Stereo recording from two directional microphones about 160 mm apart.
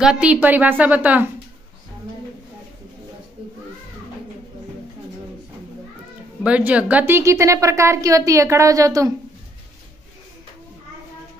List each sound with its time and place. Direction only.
0.0 s a woman's voice: 5° right (ahead or behind)
6.4 s a woman's voice: 10° right (ahead or behind)